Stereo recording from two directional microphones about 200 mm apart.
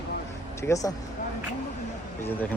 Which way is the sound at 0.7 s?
15° left (ahead or behind).